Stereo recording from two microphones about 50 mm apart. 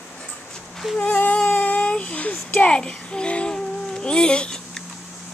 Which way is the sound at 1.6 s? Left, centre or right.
Left.